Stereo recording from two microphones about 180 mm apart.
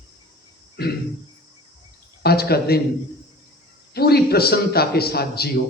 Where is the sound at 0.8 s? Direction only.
60° left (ahead or behind).